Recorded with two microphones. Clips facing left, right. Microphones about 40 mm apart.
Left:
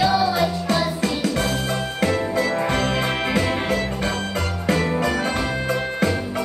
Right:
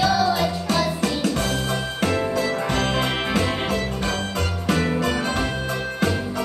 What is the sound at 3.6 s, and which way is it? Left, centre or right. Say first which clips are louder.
Music: left 1 dB; left.